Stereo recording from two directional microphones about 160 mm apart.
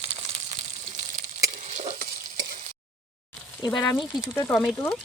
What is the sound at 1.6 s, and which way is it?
Stir, 50° right (ahead or behind).